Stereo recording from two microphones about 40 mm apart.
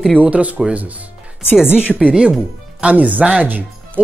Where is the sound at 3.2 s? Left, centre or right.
Right.